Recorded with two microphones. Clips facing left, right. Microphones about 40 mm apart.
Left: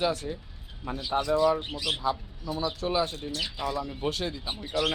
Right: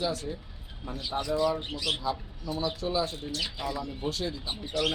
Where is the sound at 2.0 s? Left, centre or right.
Left.